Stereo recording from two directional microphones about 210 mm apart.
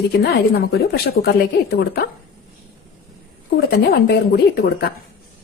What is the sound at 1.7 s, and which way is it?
Speech, 50° left (ahead or behind).